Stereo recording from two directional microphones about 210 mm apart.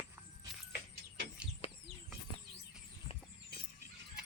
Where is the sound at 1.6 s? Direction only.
30° left (ahead or behind).